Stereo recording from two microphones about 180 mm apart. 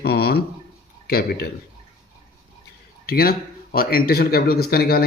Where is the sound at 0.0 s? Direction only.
60° left (ahead or behind).